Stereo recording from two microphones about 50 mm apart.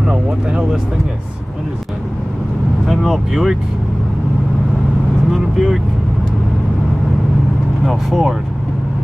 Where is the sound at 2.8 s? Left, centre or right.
Centre.